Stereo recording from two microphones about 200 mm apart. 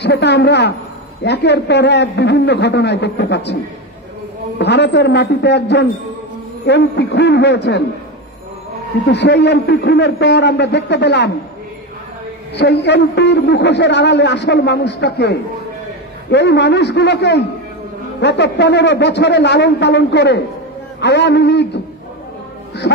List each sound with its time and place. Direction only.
0.0 s a man's voice: 60° left (ahead or behind)
4.6 s a man's voice: 60° left (ahead or behind)
9.0 s a man's voice: 60° left (ahead or behind)
12.5 s a man's voice: 55° left (ahead or behind)
22.8 s a man's voice: 55° left (ahead or behind)